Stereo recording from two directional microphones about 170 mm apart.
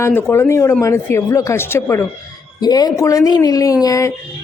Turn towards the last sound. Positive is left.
turn(degrees=20)  # may be behind; listen again after turning